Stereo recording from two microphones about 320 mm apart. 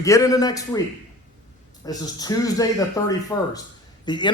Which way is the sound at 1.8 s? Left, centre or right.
Centre.